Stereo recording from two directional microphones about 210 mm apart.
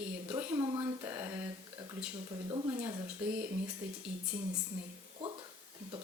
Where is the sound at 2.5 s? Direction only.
20° right (ahead or behind).